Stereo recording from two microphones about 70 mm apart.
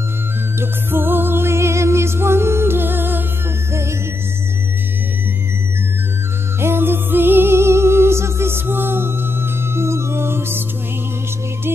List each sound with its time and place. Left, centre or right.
0.6 s music: right
6.6 s music: right